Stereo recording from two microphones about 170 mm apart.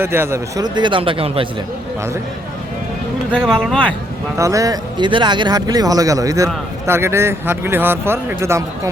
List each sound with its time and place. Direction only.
0.0 s speech: 15° right (ahead or behind); by 1.5 s 30° right (ahead or behind)
3.3 s speech: 5° left (ahead or behind)
4.4 s speech: 20° right (ahead or behind)